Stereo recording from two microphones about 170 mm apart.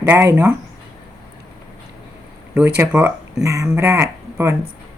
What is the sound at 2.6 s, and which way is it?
Speech, 10° right (ahead or behind).